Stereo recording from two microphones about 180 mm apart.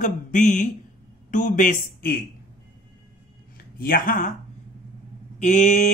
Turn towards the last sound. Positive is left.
turn(degrees=40)  # may be behind; listen again after turning